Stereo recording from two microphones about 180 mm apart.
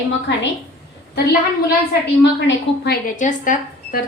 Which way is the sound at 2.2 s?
70° left (ahead or behind).